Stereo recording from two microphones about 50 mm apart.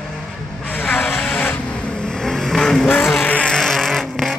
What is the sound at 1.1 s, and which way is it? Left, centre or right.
Vehicle, centre.